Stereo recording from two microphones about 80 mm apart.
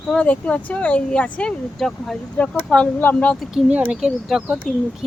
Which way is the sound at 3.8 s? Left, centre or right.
Centre.